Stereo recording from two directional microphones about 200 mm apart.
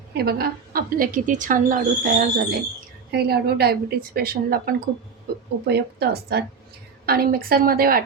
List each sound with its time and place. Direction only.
0.1 s a woman's voice: 55° right (ahead or behind)